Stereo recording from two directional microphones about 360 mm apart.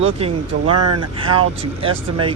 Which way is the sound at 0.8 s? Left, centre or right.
Right.